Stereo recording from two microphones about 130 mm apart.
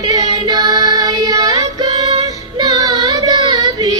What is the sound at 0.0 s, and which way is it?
Music, 30° right (ahead or behind).